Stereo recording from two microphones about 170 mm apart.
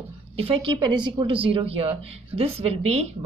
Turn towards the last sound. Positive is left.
turn(degrees=-40)  # may be behind; listen again after turning